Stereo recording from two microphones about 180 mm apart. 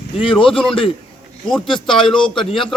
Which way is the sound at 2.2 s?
5° left (ahead or behind).